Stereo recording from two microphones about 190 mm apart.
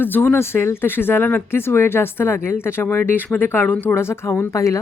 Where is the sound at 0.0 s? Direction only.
10° left (ahead or behind).